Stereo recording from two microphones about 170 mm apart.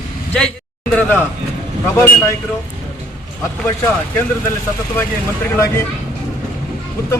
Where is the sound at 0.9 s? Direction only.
10° left (ahead or behind).